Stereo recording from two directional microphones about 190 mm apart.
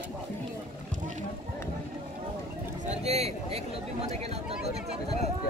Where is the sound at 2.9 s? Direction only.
35° right (ahead or behind).